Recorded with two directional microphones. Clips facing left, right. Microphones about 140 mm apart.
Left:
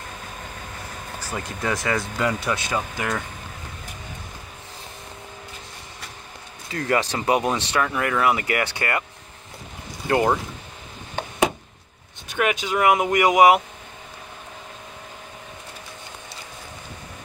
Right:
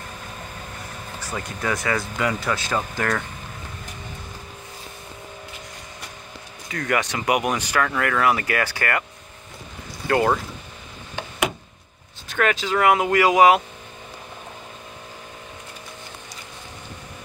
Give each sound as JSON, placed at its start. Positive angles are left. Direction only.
{"t": 1.3, "sound": "speech", "side_deg": 25}
{"t": 6.7, "sound": "speech", "side_deg": 30}
{"t": 10.0, "sound": "speech", "side_deg": 20}
{"t": 12.3, "sound": "speech", "side_deg": 15}